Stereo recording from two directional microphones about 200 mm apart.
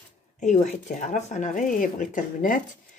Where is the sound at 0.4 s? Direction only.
35° left (ahead or behind).